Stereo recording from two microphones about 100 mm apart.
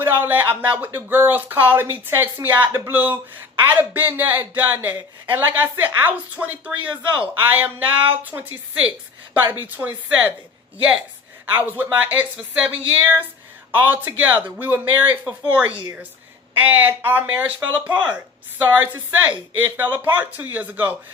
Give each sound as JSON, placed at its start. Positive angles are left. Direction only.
{"t": 0.0, "sound": "speech", "side_deg": -20}
{"t": 11.5, "sound": "speech", "side_deg": -20}